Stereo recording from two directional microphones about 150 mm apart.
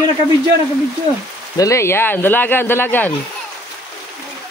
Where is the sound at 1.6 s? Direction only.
20° left (ahead or behind).